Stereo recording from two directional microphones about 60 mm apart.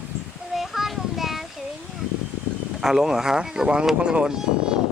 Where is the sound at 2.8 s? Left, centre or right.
Centre.